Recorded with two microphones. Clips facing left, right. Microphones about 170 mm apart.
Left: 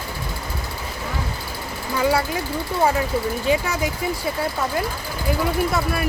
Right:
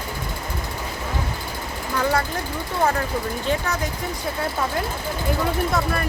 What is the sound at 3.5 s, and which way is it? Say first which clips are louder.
Speech: left 3 dB; 10° left (ahead or behind).